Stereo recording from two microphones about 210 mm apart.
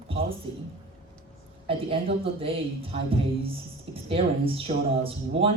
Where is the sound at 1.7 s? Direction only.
25° right (ahead or behind).